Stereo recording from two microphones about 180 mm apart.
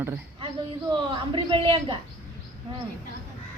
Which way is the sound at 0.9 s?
25° right (ahead or behind).